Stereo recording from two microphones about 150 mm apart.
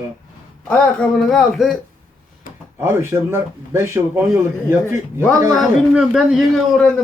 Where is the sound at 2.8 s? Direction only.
15° right (ahead or behind).